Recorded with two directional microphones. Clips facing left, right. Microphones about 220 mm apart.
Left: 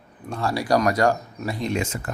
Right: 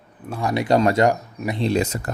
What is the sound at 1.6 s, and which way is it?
Speech, 35° right (ahead or behind).